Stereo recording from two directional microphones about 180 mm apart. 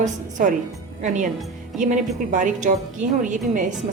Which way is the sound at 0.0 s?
45° right (ahead or behind).